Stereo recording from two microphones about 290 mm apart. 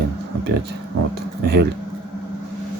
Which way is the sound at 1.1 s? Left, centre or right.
Right.